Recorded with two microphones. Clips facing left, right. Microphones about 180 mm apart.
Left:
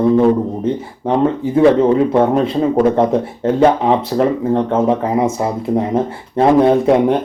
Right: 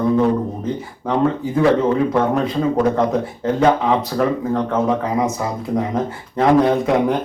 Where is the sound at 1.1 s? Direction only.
25° left (ahead or behind).